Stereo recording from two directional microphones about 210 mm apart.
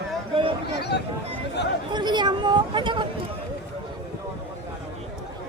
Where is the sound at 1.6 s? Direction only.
55° left (ahead or behind).